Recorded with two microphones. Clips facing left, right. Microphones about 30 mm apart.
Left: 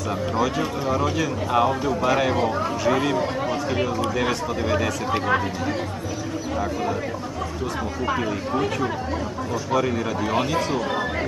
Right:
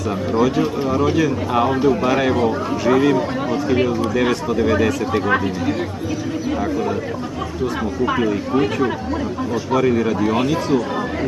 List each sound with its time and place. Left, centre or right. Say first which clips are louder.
0.3 s speech: right 7 dB; centre
8.1 s speech: right 5 dB; centre
9.7 s speech: right 6 dB; centre